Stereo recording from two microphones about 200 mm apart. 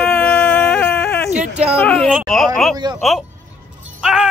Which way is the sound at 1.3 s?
35° right (ahead or behind).